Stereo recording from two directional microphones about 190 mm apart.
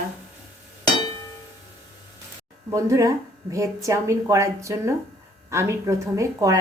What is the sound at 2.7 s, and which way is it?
Speech, 15° right (ahead or behind).